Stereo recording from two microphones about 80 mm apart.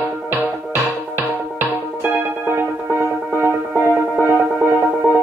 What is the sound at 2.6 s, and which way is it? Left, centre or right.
Music, right.